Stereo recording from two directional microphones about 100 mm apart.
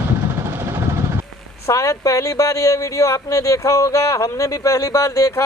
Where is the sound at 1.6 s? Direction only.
30° left (ahead or behind).